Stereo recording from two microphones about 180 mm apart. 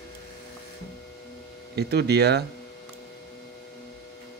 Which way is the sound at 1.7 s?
65° right (ahead or behind).